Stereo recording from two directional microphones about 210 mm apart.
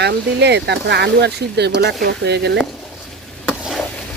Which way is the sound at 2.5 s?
Centre (ahead or behind).